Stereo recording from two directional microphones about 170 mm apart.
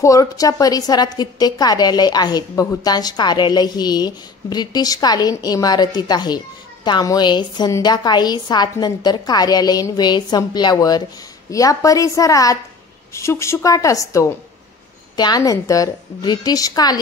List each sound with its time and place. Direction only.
0.0 s a woman's voice: 20° left (ahead or behind)